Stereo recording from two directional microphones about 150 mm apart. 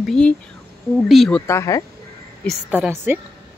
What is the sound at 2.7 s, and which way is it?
Speech, 15° right (ahead or behind).